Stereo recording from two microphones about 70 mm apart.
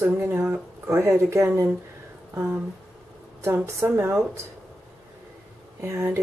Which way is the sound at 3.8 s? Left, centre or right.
Right.